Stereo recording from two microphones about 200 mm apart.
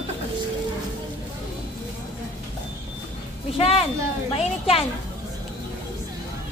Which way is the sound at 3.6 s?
30° left (ahead or behind).